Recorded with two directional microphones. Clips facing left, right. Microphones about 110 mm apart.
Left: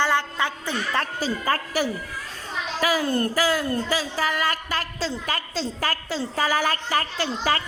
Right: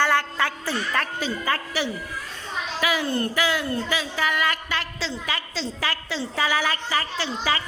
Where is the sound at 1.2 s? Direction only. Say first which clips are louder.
Left 2 dB; 40° left (ahead or behind).